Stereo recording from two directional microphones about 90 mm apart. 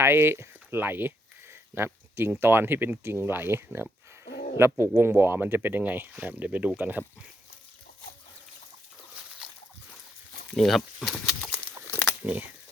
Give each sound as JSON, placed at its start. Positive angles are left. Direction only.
{"t": 0.0, "sound": "speech", "side_deg": -25}
{"t": 10.5, "sound": "speech", "side_deg": 5}
{"t": 12.2, "sound": "speech", "side_deg": -15}